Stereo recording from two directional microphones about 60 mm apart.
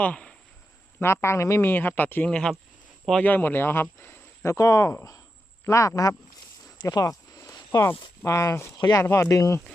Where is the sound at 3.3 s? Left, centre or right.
Left.